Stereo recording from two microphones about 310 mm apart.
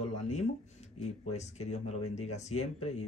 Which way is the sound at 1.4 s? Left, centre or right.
Left.